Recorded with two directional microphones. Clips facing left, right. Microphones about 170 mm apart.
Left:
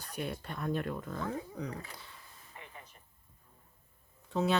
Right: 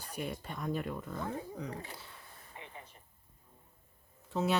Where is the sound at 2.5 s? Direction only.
25° right (ahead or behind).